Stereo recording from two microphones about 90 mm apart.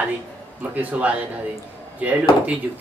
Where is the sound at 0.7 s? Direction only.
15° right (ahead or behind).